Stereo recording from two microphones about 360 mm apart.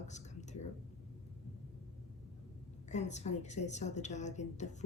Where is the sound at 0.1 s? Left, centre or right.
Centre.